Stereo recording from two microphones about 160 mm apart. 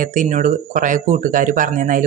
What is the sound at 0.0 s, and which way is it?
Speech, 55° right (ahead or behind).